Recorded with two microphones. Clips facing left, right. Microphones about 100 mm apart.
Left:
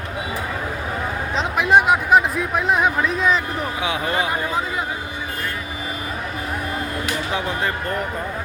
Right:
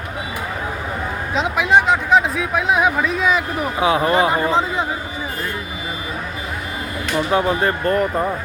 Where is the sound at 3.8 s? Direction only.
40° right (ahead or behind).